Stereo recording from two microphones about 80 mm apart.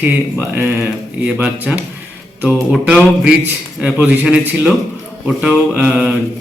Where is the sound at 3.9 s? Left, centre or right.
Right.